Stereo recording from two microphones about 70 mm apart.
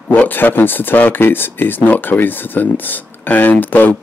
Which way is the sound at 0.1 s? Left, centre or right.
Left.